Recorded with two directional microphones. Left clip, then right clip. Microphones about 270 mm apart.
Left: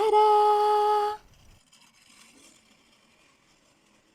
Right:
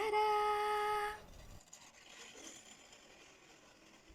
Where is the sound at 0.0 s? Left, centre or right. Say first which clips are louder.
Left 14 dB; left.